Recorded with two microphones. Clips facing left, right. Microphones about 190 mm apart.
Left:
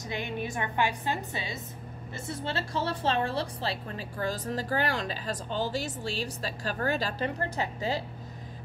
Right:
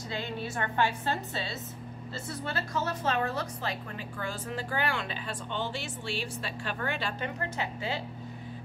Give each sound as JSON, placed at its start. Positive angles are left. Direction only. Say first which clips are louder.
{"t": 0.1, "sound": "a woman's voice", "louder": "left 2 dB", "side_deg": 15}
{"t": 2.2, "sound": "a woman's voice", "louder": "left 2 dB", "side_deg": 25}